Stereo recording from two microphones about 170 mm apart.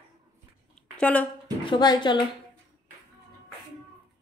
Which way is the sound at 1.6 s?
25° left (ahead or behind).